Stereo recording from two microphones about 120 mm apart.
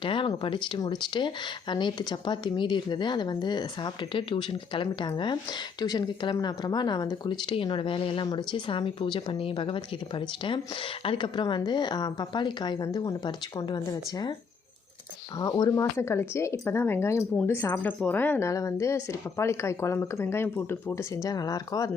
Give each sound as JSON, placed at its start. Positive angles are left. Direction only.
{"t": 0.0, "sound": "speech", "side_deg": 45}
{"t": 15.4, "sound": "speech", "side_deg": 25}